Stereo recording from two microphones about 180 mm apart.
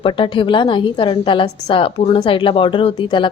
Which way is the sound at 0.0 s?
30° left (ahead or behind).